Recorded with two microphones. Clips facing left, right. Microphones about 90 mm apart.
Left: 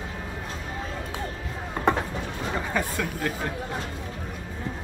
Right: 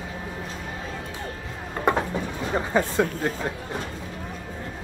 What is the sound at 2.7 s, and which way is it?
Speech, 30° right (ahead or behind).